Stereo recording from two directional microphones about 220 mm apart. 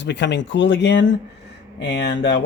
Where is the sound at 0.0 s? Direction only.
50° left (ahead or behind).